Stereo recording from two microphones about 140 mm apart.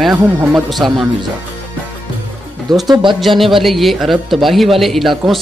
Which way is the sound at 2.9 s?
35° right (ahead or behind).